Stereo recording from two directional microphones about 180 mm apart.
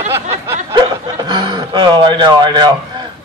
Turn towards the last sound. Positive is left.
turn(degrees=-25)  # may be behind; listen again after turning